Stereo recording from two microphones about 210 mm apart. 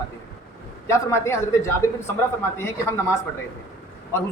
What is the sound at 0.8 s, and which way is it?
Speech, 15° left (ahead or behind).